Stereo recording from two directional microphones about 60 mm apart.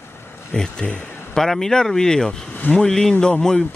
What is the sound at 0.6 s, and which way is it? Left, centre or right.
Speech, centre.